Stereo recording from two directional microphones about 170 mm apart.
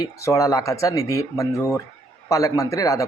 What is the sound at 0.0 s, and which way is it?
Speech, 20° left (ahead or behind).